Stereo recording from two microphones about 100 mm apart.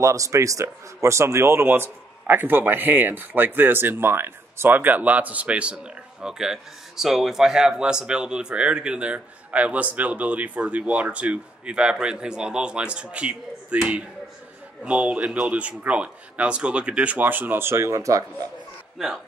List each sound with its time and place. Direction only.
0.0 s a man's voice: 30° right (ahead or behind)
18.9 s speech: 5° right (ahead or behind)